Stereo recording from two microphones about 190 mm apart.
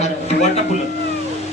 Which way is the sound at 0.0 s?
35° left (ahead or behind).